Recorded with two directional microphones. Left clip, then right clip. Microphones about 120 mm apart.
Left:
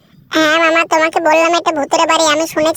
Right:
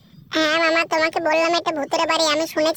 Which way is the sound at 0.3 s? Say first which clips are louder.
Left 7 dB; 55° left (ahead or behind).